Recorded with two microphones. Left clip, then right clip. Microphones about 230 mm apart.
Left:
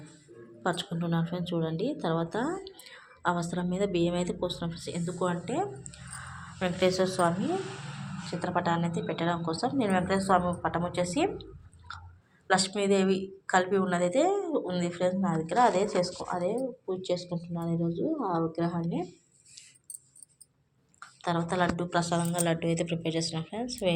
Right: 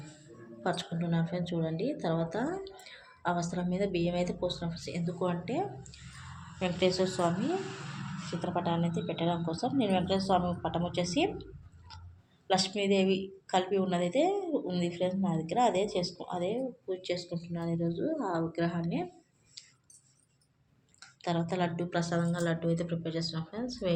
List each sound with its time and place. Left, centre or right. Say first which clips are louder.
0.6 s a woman's voice: left 2 dB; centre
8.4 s a woman's voice: left 4 dB; centre
12.5 s a woman's voice: left 3 dB; centre
21.2 s a woman's voice: left 4 dB; centre
23.0 s speech: left 5 dB; centre
23.3 s a woman's voice: left 4 dB; centre